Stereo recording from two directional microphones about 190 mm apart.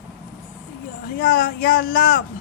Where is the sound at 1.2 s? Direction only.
50° left (ahead or behind).